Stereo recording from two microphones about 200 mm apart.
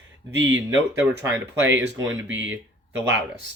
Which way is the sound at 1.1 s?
65° right (ahead or behind).